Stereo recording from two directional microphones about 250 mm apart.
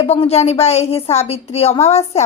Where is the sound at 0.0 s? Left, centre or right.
Left.